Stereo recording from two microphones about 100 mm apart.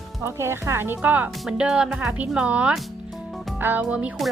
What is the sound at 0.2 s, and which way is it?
A woman's voice, 25° right (ahead or behind).